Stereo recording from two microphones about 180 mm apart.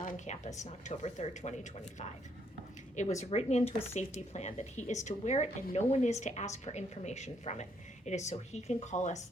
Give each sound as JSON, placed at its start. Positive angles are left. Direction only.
{"t": 0.0, "sound": "a woman's voice", "side_deg": 45}
{"t": 2.9, "sound": "a woman's voice", "side_deg": 40}